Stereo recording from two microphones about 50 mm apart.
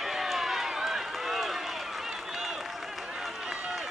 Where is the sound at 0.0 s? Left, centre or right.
Centre.